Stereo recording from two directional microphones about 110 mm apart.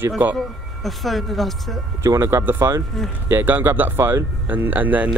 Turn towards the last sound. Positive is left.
turn(degrees=-15)  # may be behind; listen again after turning